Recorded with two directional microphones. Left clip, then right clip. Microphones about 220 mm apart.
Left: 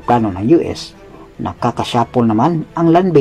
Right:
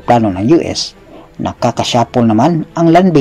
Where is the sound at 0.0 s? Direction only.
30° right (ahead or behind).